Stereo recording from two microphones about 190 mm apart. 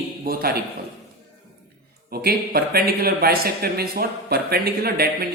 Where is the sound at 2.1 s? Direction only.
55° right (ahead or behind).